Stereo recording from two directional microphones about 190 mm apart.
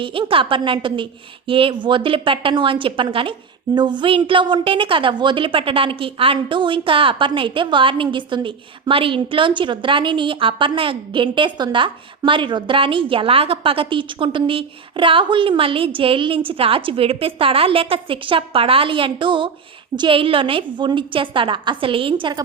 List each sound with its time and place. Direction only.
0.0 s a woman's voice: 25° right (ahead or behind)